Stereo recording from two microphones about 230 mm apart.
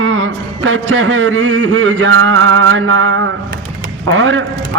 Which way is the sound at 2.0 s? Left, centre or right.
Right.